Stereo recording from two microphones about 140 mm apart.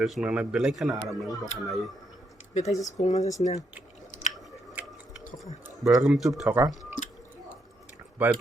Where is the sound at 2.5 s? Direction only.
55° left (ahead or behind).